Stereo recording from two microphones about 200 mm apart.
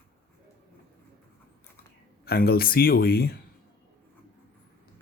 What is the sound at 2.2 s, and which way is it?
Speech, 50° left (ahead or behind).